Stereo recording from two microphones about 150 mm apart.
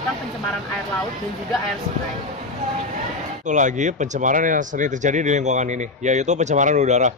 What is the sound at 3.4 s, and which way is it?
A man's voice, 55° right (ahead or behind).